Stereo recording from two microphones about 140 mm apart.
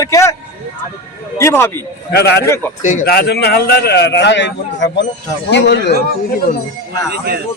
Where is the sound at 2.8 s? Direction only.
75° left (ahead or behind).